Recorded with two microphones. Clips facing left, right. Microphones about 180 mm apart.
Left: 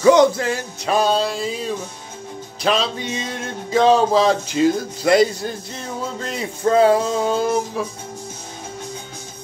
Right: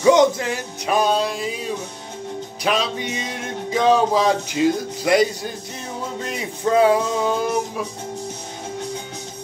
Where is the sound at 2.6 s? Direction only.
15° right (ahead or behind).